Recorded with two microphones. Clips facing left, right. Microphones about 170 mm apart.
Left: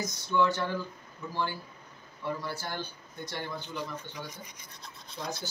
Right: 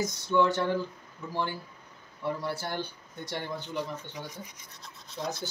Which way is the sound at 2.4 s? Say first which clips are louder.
Right 3 dB; 65° right (ahead or behind).